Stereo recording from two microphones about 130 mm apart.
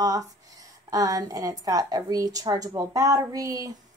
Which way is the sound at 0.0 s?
30° right (ahead or behind).